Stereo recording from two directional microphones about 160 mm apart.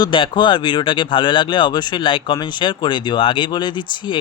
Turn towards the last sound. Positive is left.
turn(degrees=30)  # may be behind; listen again after turning